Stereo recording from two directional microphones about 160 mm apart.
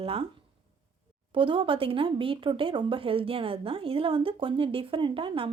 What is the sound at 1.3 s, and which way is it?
Speech, 30° right (ahead or behind).